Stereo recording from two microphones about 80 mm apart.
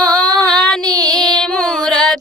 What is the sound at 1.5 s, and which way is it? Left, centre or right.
Music, centre.